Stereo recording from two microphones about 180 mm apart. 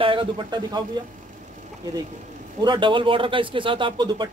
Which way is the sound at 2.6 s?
25° right (ahead or behind).